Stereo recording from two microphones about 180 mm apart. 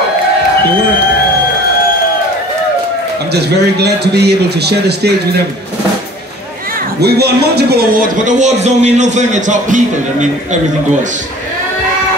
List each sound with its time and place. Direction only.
3.3 s a man's voice: 65° right (ahead or behind)
7.0 s a man's voice: 65° right (ahead or behind); by 9.8 s 40° right (ahead or behind)